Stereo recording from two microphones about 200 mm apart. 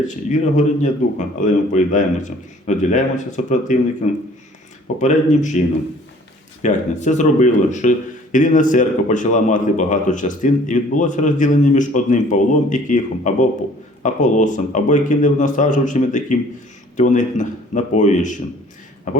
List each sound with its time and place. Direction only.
0.3 s a man's voice: 40° left (ahead or behind)